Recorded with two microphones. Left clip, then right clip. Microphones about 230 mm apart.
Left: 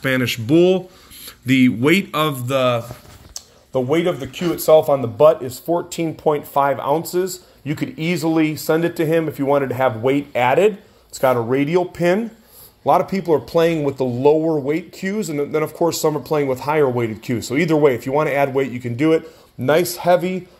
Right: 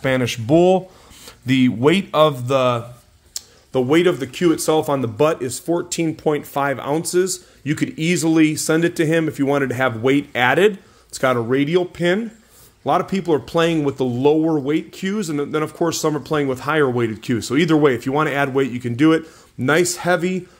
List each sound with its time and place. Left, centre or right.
0.0 s speech: right